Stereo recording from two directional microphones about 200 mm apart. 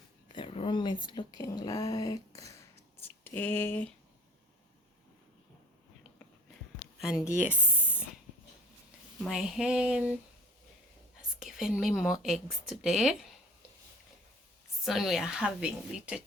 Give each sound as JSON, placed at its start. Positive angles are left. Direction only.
{"t": 0.3, "sound": "speech", "side_deg": 25}
{"t": 7.0, "sound": "a woman's voice", "side_deg": -5}
{"t": 7.3, "sound": "spray", "side_deg": -5}
{"t": 9.2, "sound": "a woman's voice", "side_deg": 0}
{"t": 11.2, "sound": "a woman's voice", "side_deg": 0}
{"t": 14.8, "sound": "a woman's voice", "side_deg": 0}